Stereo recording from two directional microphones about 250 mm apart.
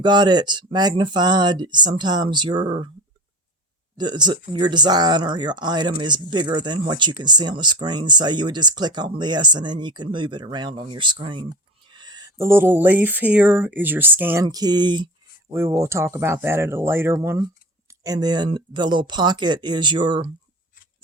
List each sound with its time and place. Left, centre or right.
0.0 s speech: centre
3.9 s speech: centre